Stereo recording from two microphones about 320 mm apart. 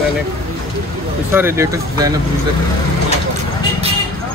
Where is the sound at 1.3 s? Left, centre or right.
Centre.